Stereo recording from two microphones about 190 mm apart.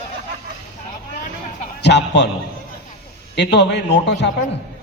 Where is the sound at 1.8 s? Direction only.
65° left (ahead or behind).